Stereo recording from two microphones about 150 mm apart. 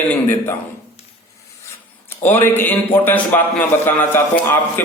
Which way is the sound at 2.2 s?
15° left (ahead or behind).